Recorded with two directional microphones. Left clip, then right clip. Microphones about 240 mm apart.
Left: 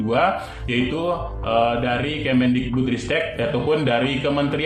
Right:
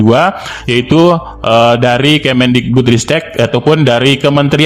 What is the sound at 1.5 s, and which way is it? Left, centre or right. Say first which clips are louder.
A man's voice: right 12 dB; right.